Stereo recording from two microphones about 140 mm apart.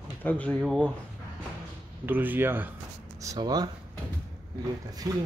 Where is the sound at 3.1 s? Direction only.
25° right (ahead or behind).